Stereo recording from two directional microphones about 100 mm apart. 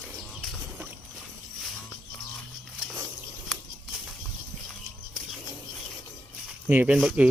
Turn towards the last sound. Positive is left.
turn(degrees=-10)  # may be behind; listen again after turning